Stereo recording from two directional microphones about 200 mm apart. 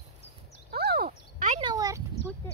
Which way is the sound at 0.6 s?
50° right (ahead or behind).